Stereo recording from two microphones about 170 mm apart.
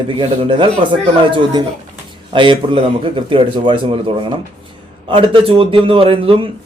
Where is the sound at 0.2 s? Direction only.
30° right (ahead or behind).